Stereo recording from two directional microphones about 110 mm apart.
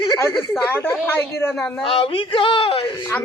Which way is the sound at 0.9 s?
15° left (ahead or behind).